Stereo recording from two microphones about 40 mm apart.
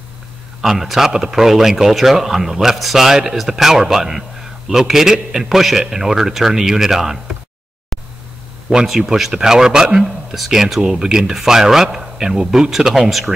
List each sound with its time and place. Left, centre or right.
0.6 s speech: centre
8.8 s speech: centre